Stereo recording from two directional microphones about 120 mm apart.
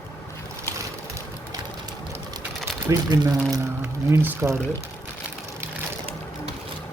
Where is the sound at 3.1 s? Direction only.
40° right (ahead or behind).